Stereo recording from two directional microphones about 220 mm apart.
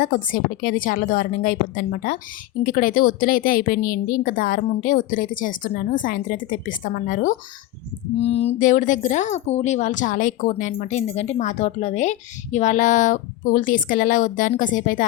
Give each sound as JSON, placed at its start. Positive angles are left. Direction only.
{"t": 0.0, "sound": "speech", "side_deg": 40}